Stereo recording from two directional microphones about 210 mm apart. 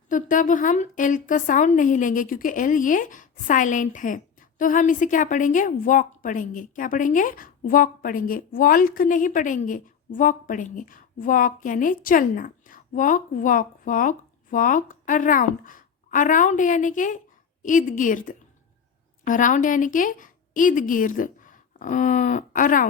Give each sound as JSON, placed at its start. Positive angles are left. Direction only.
{"t": 0.1, "sound": "a woman's voice", "side_deg": 40}